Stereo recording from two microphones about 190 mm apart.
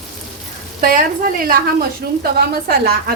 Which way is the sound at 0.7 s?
45° right (ahead or behind).